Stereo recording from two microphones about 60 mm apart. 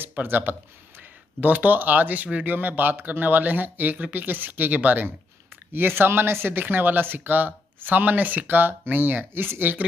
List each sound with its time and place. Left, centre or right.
0.0 s speech: right
5.7 s speech: right